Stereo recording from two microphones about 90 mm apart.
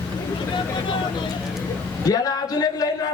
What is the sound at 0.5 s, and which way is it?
Vehicle, 60° left (ahead or behind).